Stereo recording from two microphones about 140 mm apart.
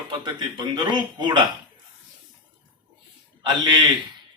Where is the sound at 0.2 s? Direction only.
30° right (ahead or behind).